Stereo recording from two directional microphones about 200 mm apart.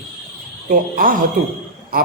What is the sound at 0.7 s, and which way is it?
Speech, 45° right (ahead or behind).